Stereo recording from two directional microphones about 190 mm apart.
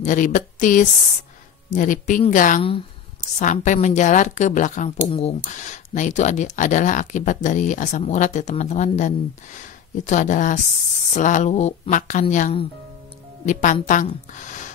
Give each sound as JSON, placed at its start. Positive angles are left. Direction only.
{"t": 0.0, "sound": "a woman's voice", "side_deg": 40}